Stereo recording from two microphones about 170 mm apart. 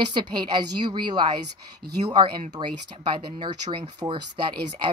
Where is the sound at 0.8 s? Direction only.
25° right (ahead or behind).